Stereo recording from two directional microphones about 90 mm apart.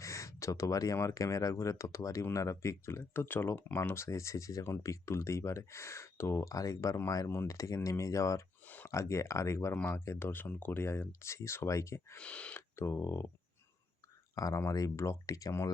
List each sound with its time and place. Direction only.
0.0 s speech: 35° left (ahead or behind)
8.6 s a sound: 20° left (ahead or behind)
8.9 s speech: 35° left (ahead or behind)
12.1 s speech: 15° left (ahead or behind)
12.5 s speech: 30° left (ahead or behind)
14.3 s speech: 40° left (ahead or behind)